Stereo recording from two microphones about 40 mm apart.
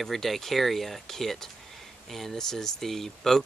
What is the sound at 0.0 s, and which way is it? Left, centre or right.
Speech, centre.